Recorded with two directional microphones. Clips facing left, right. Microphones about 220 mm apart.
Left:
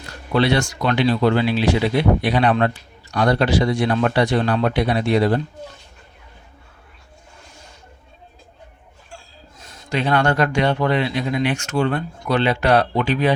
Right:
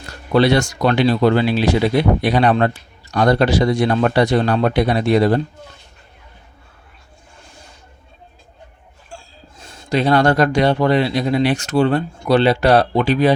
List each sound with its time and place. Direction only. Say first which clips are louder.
0.3 s speech: right 4 dB; 40° right (ahead or behind)
9.6 s speech: right 5 dB; 30° right (ahead or behind)